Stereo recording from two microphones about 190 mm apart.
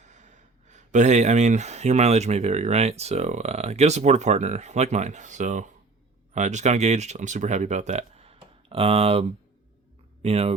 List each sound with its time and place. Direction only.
0.0 s speech: 40° right (ahead or behind)
10.2 s speech: 35° right (ahead or behind)